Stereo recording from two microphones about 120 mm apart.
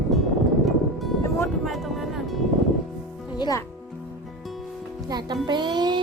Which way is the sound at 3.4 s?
30° left (ahead or behind).